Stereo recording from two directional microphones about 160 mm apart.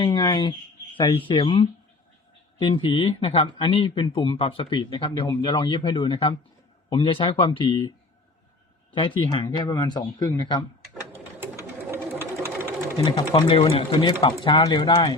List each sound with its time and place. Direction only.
0.0 s speech: 30° left (ahead or behind)
8.9 s speech: 30° left (ahead or behind)
11.9 s sewing machine: 15° right (ahead or behind)
13.0 s speech: 25° left (ahead or behind)
13.3 s speech: 35° left (ahead or behind)